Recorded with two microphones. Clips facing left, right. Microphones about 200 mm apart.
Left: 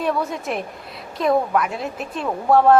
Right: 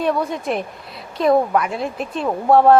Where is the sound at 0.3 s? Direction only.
5° left (ahead or behind).